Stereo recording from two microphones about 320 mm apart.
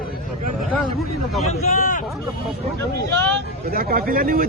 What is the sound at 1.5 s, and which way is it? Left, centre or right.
Speech, left.